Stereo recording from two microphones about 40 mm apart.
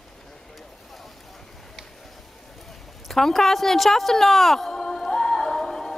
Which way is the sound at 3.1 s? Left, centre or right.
Centre.